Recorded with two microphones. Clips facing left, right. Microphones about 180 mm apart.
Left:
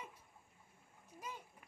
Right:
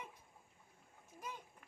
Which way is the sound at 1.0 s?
10° left (ahead or behind).